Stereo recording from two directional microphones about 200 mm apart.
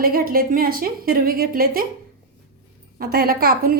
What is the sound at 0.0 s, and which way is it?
A woman's voice, 45° right (ahead or behind).